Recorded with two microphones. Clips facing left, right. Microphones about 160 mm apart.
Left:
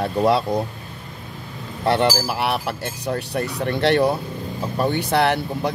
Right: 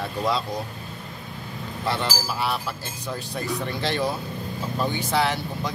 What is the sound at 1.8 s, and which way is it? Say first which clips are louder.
Speech: left 8 dB; 60° left (ahead or behind).